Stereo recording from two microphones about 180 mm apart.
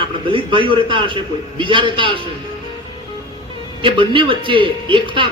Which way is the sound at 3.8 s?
30° right (ahead or behind).